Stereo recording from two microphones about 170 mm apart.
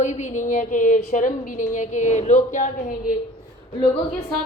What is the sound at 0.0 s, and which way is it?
A woman's voice, 45° left (ahead or behind).